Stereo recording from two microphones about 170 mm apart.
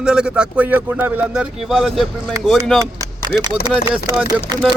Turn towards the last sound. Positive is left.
turn(degrees=-25)  # may be behind; listen again after turning